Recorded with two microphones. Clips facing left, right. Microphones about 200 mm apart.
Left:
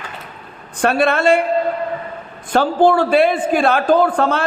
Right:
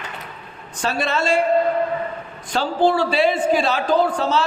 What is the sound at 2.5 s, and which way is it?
A man's voice, 55° left (ahead or behind).